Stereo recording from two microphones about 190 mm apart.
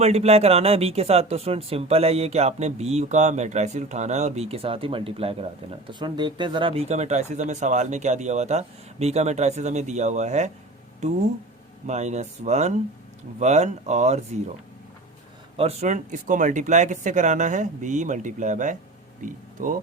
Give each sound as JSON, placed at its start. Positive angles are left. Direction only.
{"t": 0.0, "sound": "speech", "side_deg": -35}
{"t": 15.5, "sound": "speech", "side_deg": -35}